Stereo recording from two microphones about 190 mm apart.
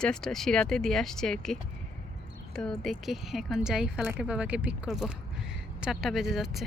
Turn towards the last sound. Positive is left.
turn(degrees=0)  # may be behind; listen again after turning